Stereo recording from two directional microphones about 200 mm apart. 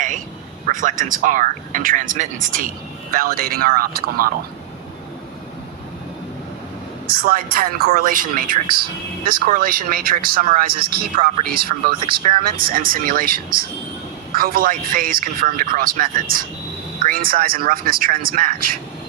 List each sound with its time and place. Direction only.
0.7 s a woman's voice: 40° right (ahead or behind)
7.1 s a woman's voice: 45° right (ahead or behind)
11.9 s speech: 25° right (ahead or behind)
12.5 s a woman's voice: 45° right (ahead or behind)